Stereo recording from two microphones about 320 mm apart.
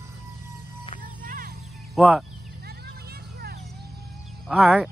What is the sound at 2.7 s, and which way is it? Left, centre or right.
Vehicle, right.